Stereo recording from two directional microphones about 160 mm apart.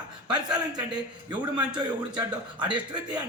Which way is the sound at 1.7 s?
30° right (ahead or behind).